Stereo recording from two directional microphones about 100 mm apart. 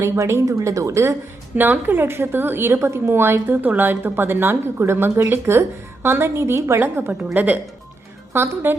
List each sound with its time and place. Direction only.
0.0 s a woman's voice: 25° right (ahead or behind)
1.5 s a woman's voice: 20° right (ahead or behind)